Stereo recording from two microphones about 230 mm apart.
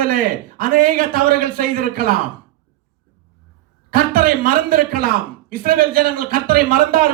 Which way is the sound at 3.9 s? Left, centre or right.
Right.